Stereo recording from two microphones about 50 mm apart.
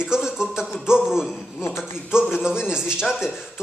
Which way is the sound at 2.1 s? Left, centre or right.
Centre.